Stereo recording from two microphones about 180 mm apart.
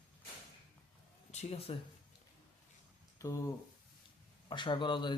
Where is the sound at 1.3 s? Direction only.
40° left (ahead or behind).